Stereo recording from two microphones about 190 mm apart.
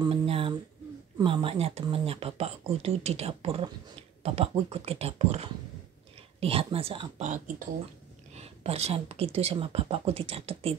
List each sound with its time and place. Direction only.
0.0 s a sound: 30° right (ahead or behind)
1.1 s speech: 25° right (ahead or behind)
7.2 s speech: 45° right (ahead or behind)
8.3 s speech: 35° right (ahead or behind)